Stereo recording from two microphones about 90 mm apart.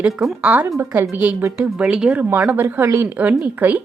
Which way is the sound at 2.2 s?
25° right (ahead or behind).